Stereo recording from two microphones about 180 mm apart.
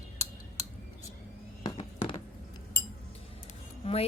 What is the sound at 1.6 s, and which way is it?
Neigh, 25° left (ahead or behind).